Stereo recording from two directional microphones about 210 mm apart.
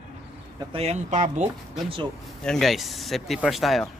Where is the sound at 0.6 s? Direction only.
30° right (ahead or behind).